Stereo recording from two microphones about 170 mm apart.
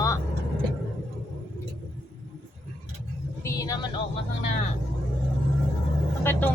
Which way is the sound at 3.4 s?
20° left (ahead or behind).